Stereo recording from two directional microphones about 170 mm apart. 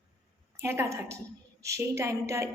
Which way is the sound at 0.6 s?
15° right (ahead or behind).